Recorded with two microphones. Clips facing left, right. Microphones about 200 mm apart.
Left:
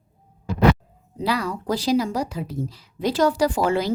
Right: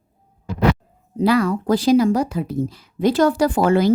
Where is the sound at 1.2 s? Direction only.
50° right (ahead or behind).